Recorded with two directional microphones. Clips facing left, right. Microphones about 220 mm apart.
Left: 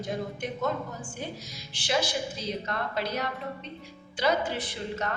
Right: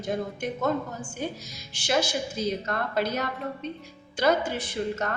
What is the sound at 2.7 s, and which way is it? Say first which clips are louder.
A woman's voice: right 4 dB; 50° right (ahead or behind).